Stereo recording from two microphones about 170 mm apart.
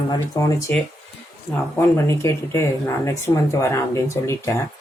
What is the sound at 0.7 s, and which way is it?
Speech, 10° left (ahead or behind).